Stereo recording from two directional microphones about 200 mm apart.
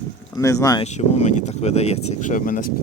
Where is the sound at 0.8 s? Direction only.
35° left (ahead or behind).